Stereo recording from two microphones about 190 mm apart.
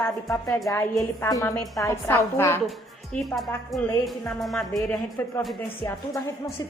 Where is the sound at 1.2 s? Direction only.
15° left (ahead or behind).